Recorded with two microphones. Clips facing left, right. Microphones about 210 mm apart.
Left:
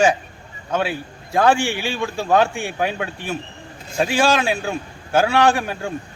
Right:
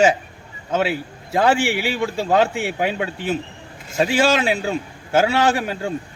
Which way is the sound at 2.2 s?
20° right (ahead or behind).